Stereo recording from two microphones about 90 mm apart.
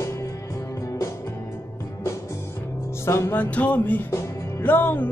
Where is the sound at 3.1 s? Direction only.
30° left (ahead or behind).